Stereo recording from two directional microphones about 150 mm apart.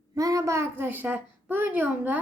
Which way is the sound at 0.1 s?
25° right (ahead or behind).